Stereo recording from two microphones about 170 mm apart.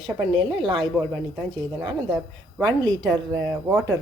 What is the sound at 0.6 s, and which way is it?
Speech, centre (ahead or behind).